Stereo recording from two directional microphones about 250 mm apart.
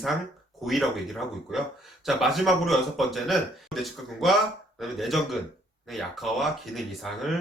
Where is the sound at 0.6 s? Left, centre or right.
Centre.